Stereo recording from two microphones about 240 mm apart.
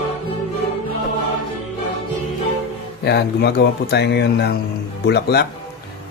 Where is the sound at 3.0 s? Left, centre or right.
Left.